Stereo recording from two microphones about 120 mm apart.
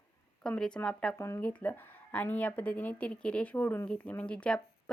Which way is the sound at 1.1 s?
25° left (ahead or behind).